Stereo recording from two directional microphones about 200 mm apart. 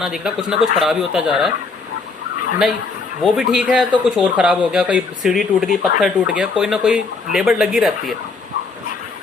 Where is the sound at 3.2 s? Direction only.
5° right (ahead or behind).